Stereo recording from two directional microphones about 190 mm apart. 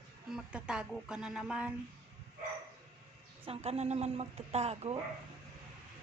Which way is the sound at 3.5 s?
35° right (ahead or behind).